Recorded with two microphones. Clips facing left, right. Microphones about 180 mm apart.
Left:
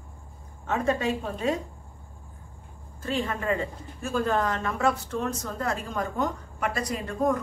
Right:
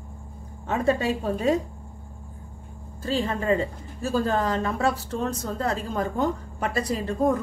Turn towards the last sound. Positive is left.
turn(degrees=-30)  # may be behind; listen again after turning